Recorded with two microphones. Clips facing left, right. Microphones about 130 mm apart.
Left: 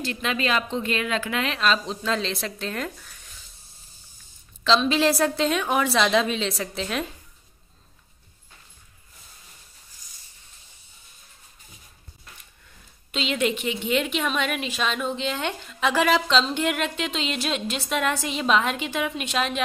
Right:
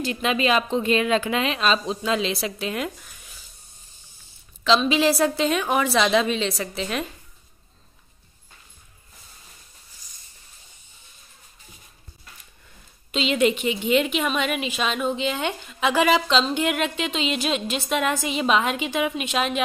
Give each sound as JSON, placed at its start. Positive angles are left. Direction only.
{"t": 0.0, "sound": "a woman's voice", "side_deg": -15}
{"t": 4.6, "sound": "a woman's voice", "side_deg": -5}
{"t": 13.1, "sound": "a woman's voice", "side_deg": 0}